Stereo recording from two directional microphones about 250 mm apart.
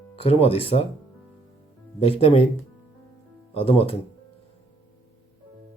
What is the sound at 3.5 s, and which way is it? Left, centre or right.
Speech, left.